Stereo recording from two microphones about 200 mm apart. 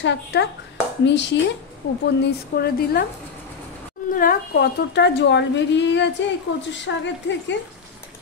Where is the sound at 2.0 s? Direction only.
55° left (ahead or behind).